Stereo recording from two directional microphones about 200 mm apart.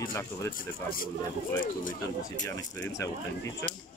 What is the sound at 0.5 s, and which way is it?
Speech, 45° left (ahead or behind).